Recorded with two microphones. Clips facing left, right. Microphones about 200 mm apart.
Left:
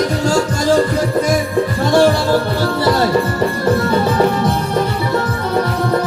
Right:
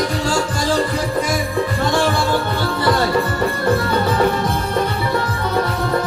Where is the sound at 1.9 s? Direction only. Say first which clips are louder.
Left 9 dB; 40° left (ahead or behind).